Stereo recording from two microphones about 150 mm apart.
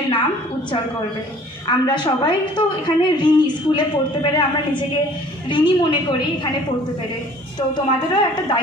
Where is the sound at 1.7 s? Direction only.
30° left (ahead or behind).